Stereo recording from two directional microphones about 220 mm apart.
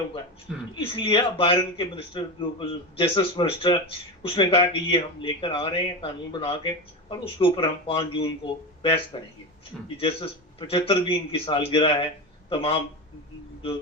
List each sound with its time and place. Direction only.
0.8 s speech: 25° left (ahead or behind)
10.7 s speech: 25° left (ahead or behind)